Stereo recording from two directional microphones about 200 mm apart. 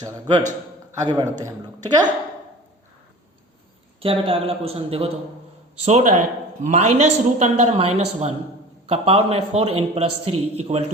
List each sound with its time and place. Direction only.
1.0 s a man's voice: 20° right (ahead or behind)
4.0 s a man's voice: 25° right (ahead or behind)